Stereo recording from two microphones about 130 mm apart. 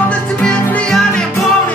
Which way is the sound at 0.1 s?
5° left (ahead or behind).